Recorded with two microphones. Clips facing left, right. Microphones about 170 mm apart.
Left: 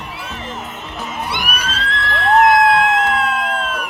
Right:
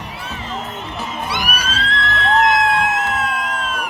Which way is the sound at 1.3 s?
55° left (ahead or behind).